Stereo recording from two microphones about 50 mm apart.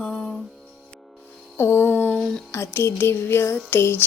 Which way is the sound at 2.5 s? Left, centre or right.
Left.